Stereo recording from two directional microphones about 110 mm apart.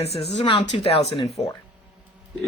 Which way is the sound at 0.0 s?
70° left (ahead or behind).